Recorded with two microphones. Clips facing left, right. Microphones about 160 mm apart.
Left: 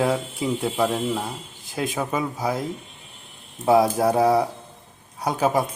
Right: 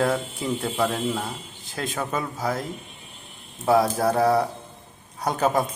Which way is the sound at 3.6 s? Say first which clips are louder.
Left 2 dB; 20° left (ahead or behind).